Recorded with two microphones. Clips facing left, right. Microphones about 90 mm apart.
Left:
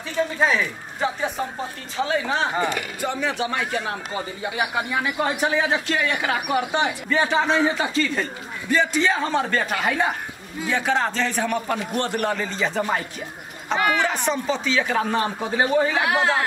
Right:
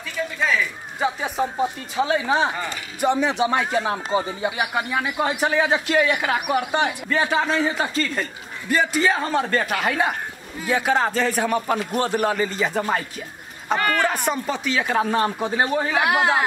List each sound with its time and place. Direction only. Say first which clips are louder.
0.4 s speech: even; 30° left (ahead or behind)
2.0 s a man's voice: right 3 dB; 15° right (ahead or behind)
5.0 s a man's voice: even; 5° right (ahead or behind)
13.7 s speech: left 1 dB; 10° left (ahead or behind)
14.0 s a man's voice: even; 5° right (ahead or behind)
16.0 s a man's voice: right 2 dB; 15° right (ahead or behind)